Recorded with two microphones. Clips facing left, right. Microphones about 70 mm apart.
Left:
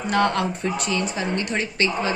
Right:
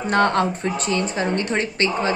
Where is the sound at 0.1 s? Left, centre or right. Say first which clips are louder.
Right 3 dB; right.